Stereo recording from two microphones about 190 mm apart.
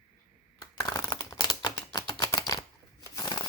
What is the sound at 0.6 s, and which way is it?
Typewriter, 20° left (ahead or behind).